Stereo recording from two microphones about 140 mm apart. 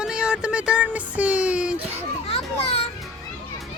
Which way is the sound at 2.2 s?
45° left (ahead or behind).